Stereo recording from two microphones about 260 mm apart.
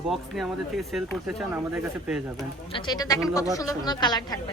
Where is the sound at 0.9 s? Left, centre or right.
Centre.